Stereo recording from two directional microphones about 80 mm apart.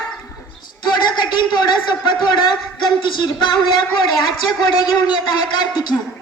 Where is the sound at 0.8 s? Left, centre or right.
Left.